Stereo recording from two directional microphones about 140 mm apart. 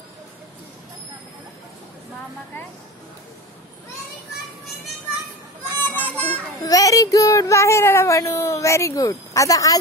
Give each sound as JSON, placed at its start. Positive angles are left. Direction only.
{"t": 5.8, "sound": "children playing", "side_deg": 15}
{"t": 6.6, "sound": "speech", "side_deg": 25}